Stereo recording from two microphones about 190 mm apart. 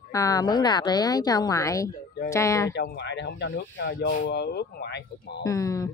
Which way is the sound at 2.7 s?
60° left (ahead or behind).